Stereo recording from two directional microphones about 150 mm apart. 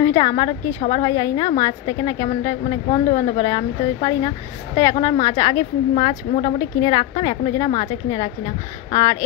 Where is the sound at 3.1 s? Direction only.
45° left (ahead or behind).